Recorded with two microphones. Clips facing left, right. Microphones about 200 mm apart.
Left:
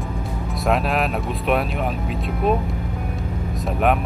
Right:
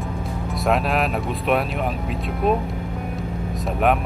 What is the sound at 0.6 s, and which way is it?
Speech, centre (ahead or behind).